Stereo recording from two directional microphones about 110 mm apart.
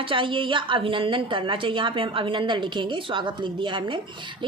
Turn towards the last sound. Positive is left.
turn(degrees=-45)  # may be behind; listen again after turning